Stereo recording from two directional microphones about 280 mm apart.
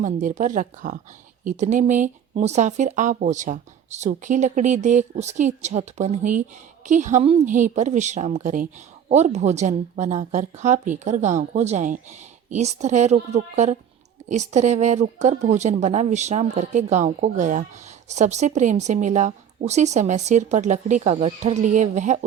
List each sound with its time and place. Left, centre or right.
0.0 s speech: right